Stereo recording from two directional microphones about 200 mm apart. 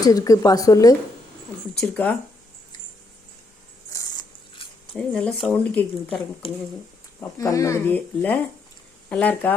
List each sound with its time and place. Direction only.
0.0 s speech: 15° left (ahead or behind)
1.8 s speech: 5° left (ahead or behind)
3.9 s a sound: 15° left (ahead or behind)
4.9 s speech: 5° left (ahead or behind)
6.4 s speech: 25° left (ahead or behind)
7.2 s speech: 15° left (ahead or behind)